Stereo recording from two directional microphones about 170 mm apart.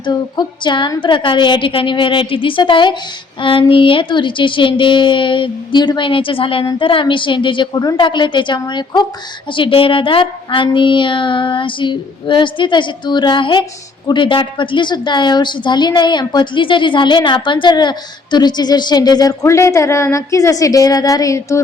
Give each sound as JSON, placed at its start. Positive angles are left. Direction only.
{"t": 0.0, "sound": "a woman's voice", "side_deg": 25}